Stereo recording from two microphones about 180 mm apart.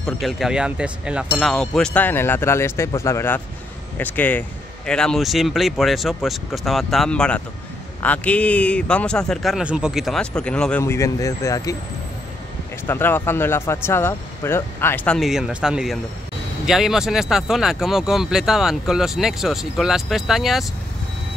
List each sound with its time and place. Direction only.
0.0 s a man's voice: centre (ahead or behind); by 11.7 s 20° left (ahead or behind)
12.8 s a man's voice: 10° left (ahead or behind)
15.1 s speech: centre (ahead or behind)